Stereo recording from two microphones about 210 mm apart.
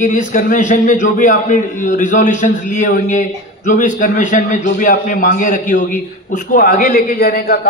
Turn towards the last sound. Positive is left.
turn(degrees=40)  # may be behind; listen again after turning